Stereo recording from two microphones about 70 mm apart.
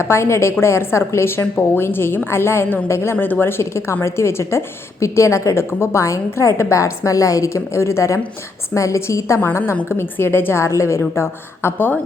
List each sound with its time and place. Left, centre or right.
0.0 s a woman's voice: left
3.6 s a woman's voice: left